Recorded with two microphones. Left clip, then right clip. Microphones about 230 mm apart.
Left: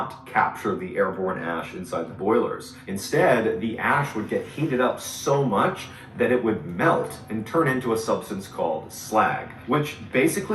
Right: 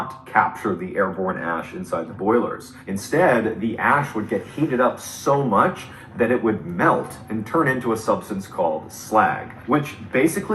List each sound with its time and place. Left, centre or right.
0.3 s speech: centre